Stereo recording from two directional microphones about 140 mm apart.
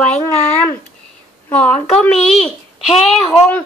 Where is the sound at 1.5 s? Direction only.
10° left (ahead or behind).